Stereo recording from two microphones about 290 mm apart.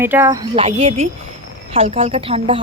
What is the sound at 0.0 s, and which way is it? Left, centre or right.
Speech, centre.